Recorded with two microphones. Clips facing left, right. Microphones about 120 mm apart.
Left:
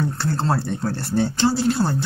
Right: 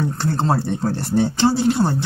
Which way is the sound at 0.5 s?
20° right (ahead or behind).